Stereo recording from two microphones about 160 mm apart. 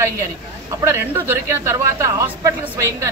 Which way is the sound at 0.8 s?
15° right (ahead or behind).